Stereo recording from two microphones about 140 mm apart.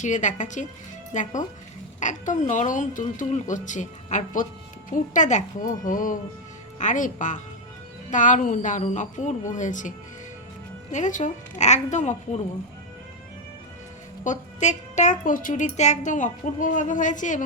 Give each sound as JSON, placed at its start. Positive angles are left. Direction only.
{"t": 0.0, "sound": "a woman's voice", "side_deg": 60}
{"t": 5.8, "sound": "music", "side_deg": 70}
{"t": 6.7, "sound": "a woman's voice", "side_deg": 65}
{"t": 10.9, "sound": "a woman's voice", "side_deg": 60}
{"t": 14.3, "sound": "a woman's voice", "side_deg": 60}